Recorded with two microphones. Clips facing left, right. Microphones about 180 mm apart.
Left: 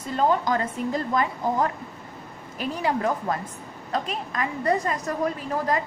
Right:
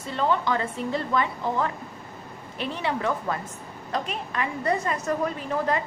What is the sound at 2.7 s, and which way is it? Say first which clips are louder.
A woman's voice: left 3 dB; 40° left (ahead or behind).